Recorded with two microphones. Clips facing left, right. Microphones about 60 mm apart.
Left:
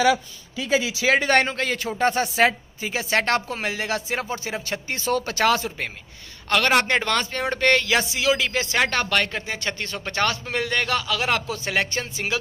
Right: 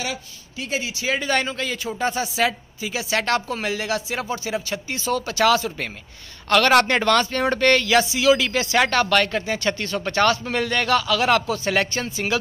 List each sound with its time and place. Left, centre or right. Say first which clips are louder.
1.0 s a man's voice: left 3 dB; left
2.4 s a woman's voice: left 3 dB; left
6.5 s a man's voice: right 3 dB; centre